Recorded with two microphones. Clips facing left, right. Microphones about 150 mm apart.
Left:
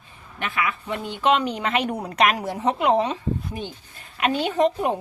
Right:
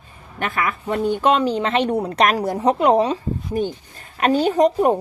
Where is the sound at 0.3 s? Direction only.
45° right (ahead or behind).